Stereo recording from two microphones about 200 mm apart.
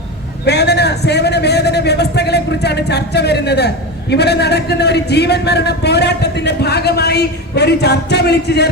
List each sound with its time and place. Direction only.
0.4 s speech: 55° left (ahead or behind)